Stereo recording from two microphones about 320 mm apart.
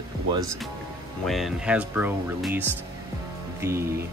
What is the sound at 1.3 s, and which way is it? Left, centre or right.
Speech, centre.